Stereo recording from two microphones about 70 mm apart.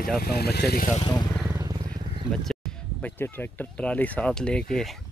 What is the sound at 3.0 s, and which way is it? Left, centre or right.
Speech, left.